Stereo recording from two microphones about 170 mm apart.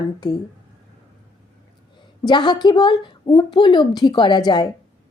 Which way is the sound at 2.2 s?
25° left (ahead or behind).